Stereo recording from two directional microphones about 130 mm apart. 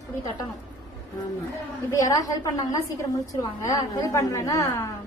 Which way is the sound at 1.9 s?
25° left (ahead or behind).